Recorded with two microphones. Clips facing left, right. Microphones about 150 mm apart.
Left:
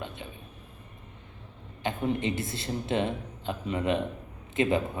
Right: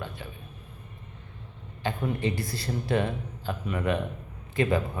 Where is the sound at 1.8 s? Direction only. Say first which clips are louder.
Even; 20° left (ahead or behind).